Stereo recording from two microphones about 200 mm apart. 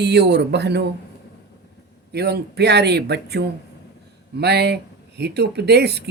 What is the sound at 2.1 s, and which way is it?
Speech, 55° right (ahead or behind).